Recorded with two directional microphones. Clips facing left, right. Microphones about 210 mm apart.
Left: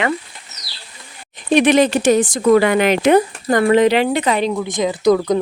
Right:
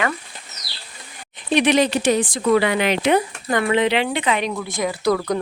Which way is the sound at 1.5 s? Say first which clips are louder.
Left 4 dB; 50° left (ahead or behind).